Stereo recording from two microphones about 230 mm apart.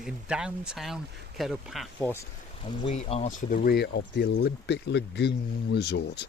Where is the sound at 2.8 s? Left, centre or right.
Left.